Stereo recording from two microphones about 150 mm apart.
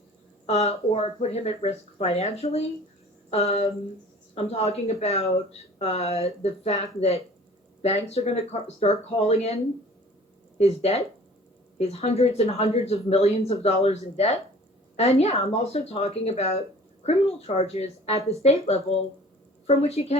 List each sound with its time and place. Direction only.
0.4 s speech: 45° left (ahead or behind)
10.6 s speech: 45° left (ahead or behind)